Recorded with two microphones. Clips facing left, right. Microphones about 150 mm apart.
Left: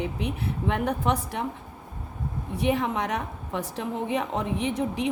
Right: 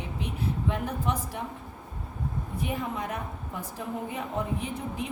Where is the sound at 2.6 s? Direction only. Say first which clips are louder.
Left 8 dB; 90° left.